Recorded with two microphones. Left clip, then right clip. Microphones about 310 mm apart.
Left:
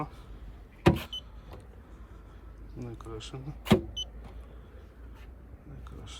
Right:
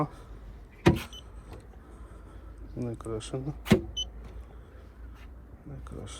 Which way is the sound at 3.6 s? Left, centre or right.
Centre.